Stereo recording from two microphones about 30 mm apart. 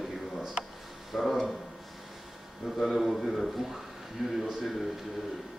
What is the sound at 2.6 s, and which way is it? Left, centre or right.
Speech, centre.